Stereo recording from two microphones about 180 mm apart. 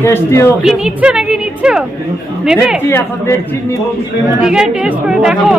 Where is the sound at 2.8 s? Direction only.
15° left (ahead or behind).